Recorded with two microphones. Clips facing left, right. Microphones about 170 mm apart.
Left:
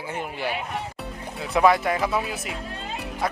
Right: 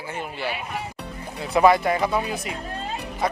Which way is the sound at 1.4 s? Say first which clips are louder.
Right 2 dB; centre (ahead or behind).